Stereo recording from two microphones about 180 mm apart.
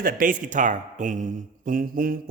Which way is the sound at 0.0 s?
50° right (ahead or behind).